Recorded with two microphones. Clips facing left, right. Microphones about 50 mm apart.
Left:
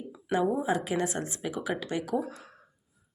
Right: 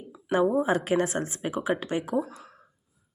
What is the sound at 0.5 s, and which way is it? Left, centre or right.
Speech, right.